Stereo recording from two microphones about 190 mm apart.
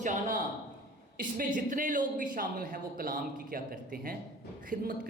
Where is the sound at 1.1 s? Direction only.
45° right (ahead or behind).